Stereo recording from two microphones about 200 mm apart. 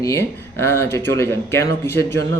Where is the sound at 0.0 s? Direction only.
15° left (ahead or behind).